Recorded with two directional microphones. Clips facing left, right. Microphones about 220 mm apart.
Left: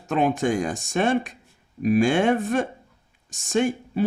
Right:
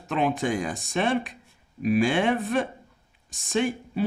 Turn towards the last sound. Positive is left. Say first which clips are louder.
# left 3 dB
turn(degrees=45)  # may be behind; listen again after turning